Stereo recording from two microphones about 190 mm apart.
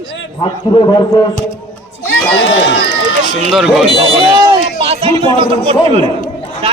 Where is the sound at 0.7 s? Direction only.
25° left (ahead or behind).